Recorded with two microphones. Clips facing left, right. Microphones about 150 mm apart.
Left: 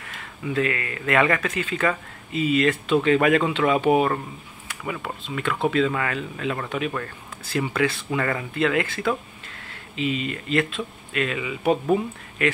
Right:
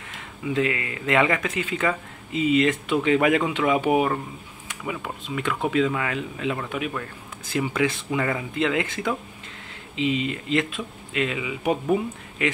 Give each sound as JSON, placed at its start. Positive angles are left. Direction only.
{"t": 0.5, "sound": "speech", "side_deg": -20}